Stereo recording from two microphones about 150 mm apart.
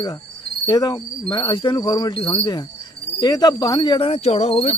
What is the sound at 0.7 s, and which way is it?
Cricket, 30° left (ahead or behind).